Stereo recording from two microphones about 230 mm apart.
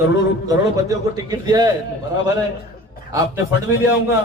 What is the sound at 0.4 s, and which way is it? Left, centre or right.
A man's voice, centre.